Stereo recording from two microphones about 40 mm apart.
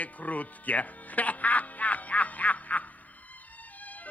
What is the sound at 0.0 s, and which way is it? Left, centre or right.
Music, left.